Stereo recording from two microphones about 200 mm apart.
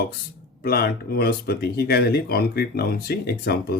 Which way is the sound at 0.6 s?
50° left (ahead or behind).